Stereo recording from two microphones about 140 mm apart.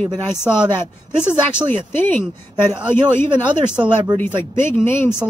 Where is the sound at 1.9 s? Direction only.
15° left (ahead or behind).